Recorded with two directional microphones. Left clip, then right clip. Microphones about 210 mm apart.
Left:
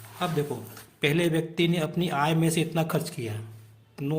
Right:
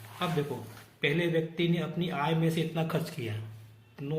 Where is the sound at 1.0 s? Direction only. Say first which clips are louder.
Left 3 dB; 40° left (ahead or behind).